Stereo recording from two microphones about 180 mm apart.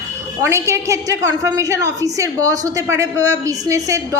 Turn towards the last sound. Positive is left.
turn(degrees=-15)  # may be behind; listen again after turning